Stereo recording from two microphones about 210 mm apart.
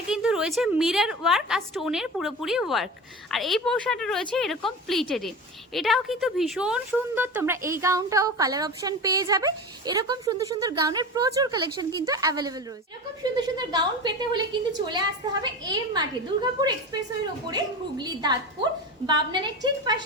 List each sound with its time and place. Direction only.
0.1 s a woman's voice: 5° right (ahead or behind); by 20.0 s 20° right (ahead or behind)